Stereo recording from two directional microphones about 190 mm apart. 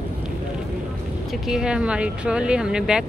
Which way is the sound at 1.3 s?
Centre (ahead or behind).